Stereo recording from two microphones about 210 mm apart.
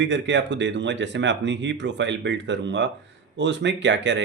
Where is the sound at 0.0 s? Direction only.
60° right (ahead or behind).